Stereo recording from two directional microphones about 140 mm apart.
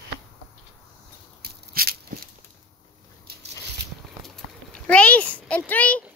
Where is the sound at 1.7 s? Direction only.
90° right.